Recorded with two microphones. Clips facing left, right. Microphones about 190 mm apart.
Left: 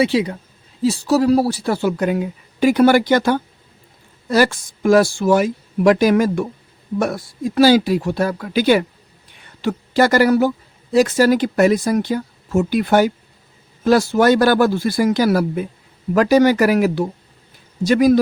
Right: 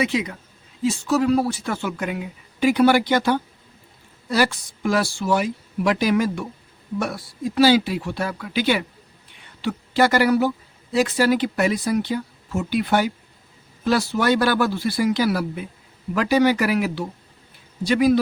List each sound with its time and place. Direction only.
0.0 s speech: 30° left (ahead or behind)